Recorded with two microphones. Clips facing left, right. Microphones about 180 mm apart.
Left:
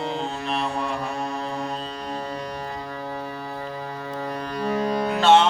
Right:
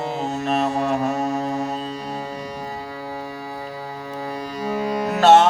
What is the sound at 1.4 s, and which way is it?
Music, 10° right (ahead or behind).